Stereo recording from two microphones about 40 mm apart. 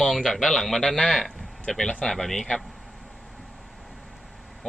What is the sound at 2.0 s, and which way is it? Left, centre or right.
Speech, centre.